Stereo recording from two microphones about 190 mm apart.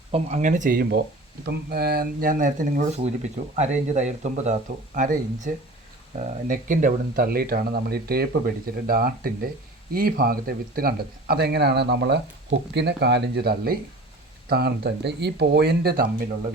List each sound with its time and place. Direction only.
0.1 s speech: 35° right (ahead or behind); by 16.0 s 55° right (ahead or behind)